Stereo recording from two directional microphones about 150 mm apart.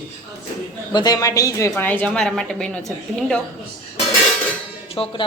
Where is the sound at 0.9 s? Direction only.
25° left (ahead or behind).